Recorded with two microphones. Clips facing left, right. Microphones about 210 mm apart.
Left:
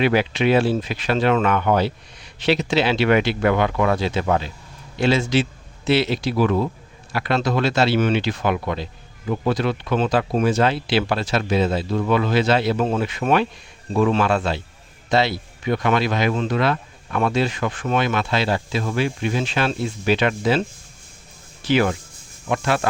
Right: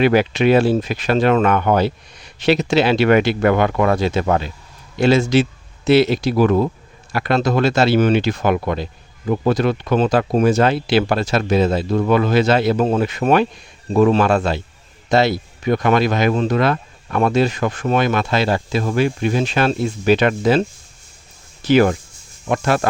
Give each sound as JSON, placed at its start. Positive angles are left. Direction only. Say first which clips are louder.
{"t": 0.0, "sound": "a man's voice", "louder": "right 4 dB", "side_deg": -45}
{"t": 21.7, "sound": "speech", "louder": "right 5 dB", "side_deg": -45}